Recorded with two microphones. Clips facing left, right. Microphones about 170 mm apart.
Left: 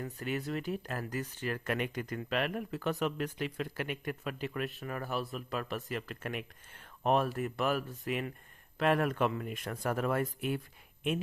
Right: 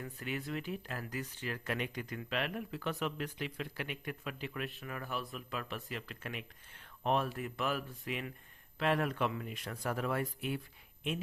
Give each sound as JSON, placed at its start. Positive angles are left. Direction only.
{"t": 0.0, "sound": "speech", "side_deg": 40}